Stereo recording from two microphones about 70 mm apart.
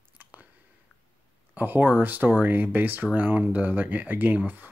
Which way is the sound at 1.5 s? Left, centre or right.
Right.